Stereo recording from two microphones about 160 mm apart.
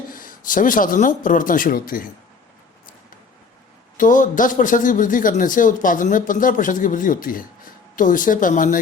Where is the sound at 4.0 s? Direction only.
55° left (ahead or behind).